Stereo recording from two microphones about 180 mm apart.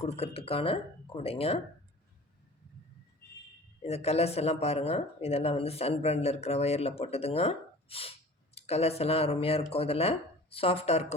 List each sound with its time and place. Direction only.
0.0 s speech: 35° left (ahead or behind)
3.8 s speech: 35° left (ahead or behind)